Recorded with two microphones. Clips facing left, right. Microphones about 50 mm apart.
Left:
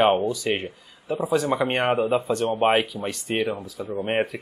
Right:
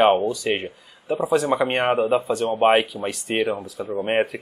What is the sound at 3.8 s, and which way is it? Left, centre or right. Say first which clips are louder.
Speech: right 2 dB; right.